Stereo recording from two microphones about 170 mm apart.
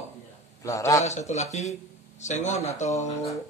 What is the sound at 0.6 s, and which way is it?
Speech, 20° left (ahead or behind).